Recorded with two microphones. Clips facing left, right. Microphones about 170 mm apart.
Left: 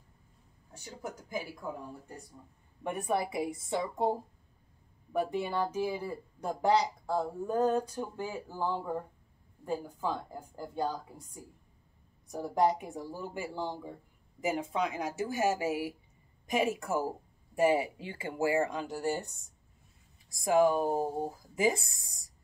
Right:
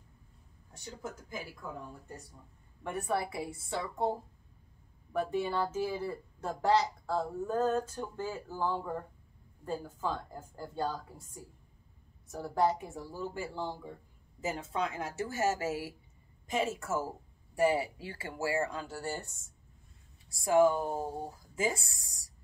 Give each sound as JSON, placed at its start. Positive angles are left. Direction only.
{"t": 0.8, "sound": "speech", "side_deg": 15}
{"t": 2.8, "sound": "speech", "side_deg": 20}
{"t": 5.1, "sound": "speech", "side_deg": 15}
{"t": 12.3, "sound": "speech", "side_deg": 15}
{"t": 20.3, "sound": "speech", "side_deg": 20}